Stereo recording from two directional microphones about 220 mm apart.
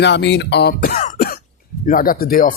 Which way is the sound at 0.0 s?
50° left (ahead or behind).